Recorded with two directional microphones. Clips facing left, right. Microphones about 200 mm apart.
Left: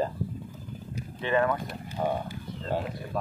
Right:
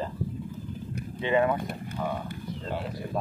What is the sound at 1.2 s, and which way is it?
Speech, 20° right (ahead or behind).